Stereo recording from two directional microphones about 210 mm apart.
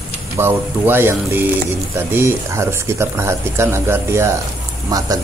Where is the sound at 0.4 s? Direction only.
10° right (ahead or behind).